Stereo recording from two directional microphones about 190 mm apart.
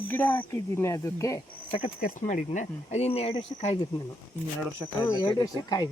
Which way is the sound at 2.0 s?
45° left (ahead or behind).